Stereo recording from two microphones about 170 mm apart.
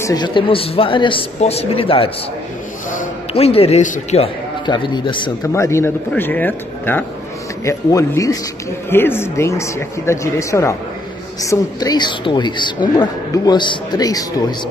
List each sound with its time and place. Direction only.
0.0 s speech: 25° left (ahead or behind)
3.3 s speech: 35° left (ahead or behind)
4.6 s a woman's voice: 25° left (ahead or behind)
5.5 s a woman's voice: 15° left (ahead or behind)